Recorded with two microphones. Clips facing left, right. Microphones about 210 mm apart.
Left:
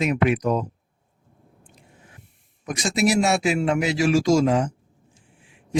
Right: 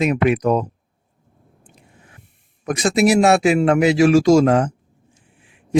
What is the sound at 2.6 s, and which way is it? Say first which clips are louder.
A man's voice: right 6 dB; 60° right (ahead or behind).